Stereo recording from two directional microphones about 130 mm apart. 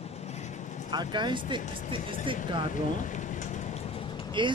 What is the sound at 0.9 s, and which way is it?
Speech, 35° right (ahead or behind).